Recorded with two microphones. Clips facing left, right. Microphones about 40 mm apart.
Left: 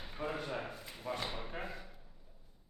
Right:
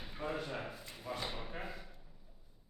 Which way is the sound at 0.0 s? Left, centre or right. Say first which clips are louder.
Even; centre.